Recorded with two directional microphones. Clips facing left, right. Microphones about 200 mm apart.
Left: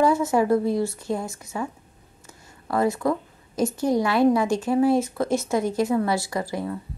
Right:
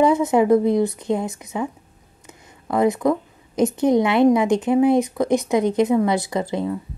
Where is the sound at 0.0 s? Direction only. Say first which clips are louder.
Right 4 dB; 20° right (ahead or behind).